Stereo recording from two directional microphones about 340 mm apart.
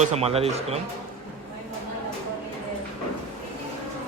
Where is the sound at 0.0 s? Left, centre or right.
Centre.